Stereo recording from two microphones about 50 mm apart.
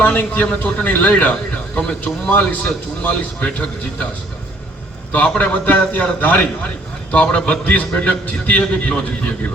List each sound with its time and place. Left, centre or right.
0.0 s a man's voice: left
1.7 s speech: centre
2.3 s a man's voice: left
5.4 s a man's voice: left
7.1 s speech: left
7.6 s a man's voice: left